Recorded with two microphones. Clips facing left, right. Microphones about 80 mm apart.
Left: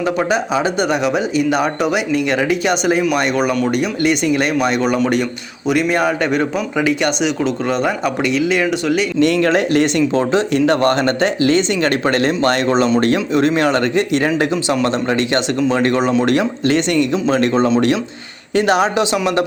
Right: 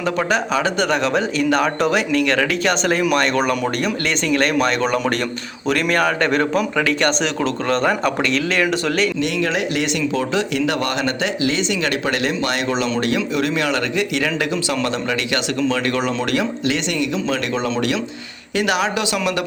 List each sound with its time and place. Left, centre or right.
0.0 s speech: centre
9.2 s speech: left